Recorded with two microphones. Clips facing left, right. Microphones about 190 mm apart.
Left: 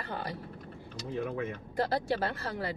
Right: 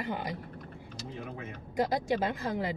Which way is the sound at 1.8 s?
15° right (ahead or behind).